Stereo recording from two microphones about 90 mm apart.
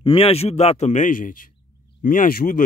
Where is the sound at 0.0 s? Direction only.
90° left.